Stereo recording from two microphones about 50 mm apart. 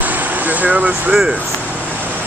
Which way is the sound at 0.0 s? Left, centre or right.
Right.